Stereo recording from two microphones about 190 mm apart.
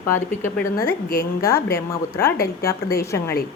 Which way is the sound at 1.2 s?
15° left (ahead or behind).